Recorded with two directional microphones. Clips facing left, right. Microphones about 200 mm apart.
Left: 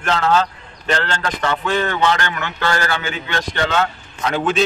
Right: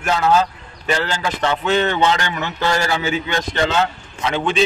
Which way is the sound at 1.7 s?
25° right (ahead or behind).